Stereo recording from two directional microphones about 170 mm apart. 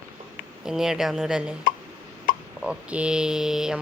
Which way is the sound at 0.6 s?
5° right (ahead or behind).